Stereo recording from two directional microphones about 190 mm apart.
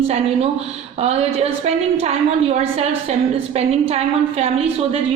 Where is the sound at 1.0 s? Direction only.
35° right (ahead or behind).